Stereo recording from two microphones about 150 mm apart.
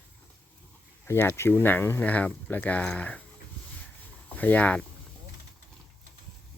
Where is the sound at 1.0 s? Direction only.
15° left (ahead or behind).